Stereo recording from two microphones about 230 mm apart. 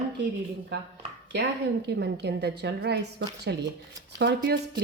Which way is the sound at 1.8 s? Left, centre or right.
Right.